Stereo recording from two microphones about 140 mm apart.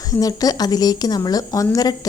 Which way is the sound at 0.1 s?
25° left (ahead or behind).